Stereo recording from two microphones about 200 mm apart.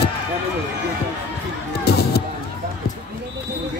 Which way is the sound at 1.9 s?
55° left (ahead or behind).